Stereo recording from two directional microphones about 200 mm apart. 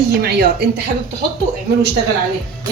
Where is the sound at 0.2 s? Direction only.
50° right (ahead or behind).